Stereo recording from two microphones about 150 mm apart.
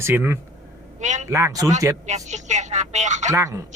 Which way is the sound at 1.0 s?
55° right (ahead or behind).